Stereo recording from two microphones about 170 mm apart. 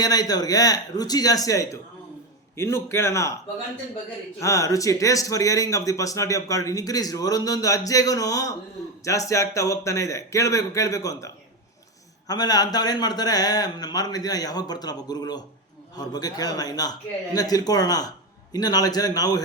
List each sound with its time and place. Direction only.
0.0 s a man's voice: 20° left (ahead or behind)
4.4 s speech: 20° left (ahead or behind)
12.3 s speech: 25° left (ahead or behind)